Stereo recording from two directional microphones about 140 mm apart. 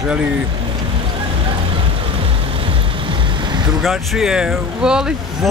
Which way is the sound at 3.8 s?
Centre (ahead or behind).